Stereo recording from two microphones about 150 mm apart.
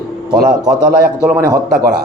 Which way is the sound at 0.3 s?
5° right (ahead or behind).